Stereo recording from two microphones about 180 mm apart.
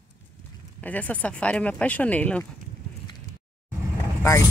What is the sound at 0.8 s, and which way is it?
Speech, 10° left (ahead or behind).